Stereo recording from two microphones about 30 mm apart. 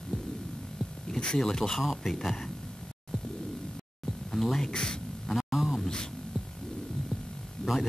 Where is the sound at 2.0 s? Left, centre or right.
Centre.